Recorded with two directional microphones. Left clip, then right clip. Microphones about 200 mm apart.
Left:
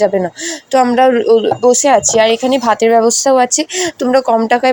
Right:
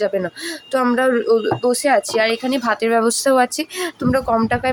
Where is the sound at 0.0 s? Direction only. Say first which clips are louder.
Left 7 dB; 15° left (ahead or behind).